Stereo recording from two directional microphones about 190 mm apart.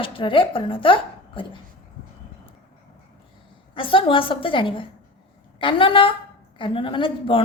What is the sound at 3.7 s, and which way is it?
A woman's voice, 25° left (ahead or behind).